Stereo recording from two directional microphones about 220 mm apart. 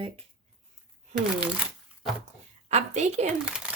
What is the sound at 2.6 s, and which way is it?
Speech, 30° right (ahead or behind).